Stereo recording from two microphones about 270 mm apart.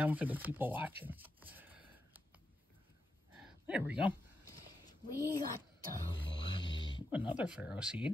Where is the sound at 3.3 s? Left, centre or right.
Centre.